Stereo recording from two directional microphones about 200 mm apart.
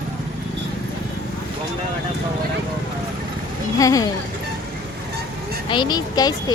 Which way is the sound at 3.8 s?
15° left (ahead or behind).